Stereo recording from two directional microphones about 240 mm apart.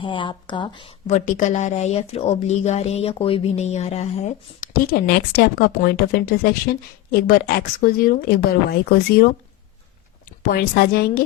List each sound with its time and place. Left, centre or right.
0.0 s a woman's voice: left
10.4 s speech: left